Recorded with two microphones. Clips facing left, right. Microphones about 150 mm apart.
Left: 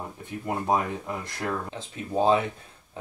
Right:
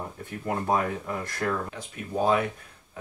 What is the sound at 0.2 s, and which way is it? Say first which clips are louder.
Speech: even; 20° left (ahead or behind).